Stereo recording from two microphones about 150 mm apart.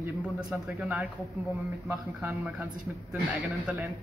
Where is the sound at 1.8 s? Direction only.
15° right (ahead or behind).